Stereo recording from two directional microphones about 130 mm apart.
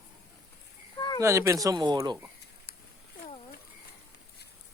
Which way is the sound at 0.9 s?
30° left (ahead or behind).